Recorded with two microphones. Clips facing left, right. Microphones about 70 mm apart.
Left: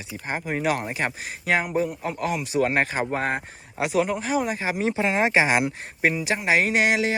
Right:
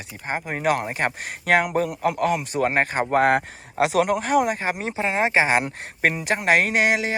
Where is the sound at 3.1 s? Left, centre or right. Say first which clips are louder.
Right 8 dB; right.